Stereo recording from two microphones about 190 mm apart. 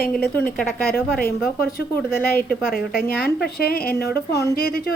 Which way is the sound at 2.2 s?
50° left (ahead or behind).